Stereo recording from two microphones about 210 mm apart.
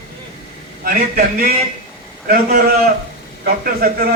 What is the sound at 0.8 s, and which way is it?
A man's voice, 40° right (ahead or behind).